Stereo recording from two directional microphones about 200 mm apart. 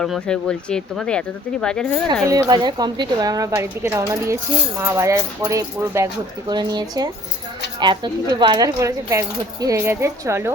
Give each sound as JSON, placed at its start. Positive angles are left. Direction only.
{"t": 0.0, "sound": "speech", "side_deg": 5}
{"t": 2.2, "sound": "speech", "side_deg": -20}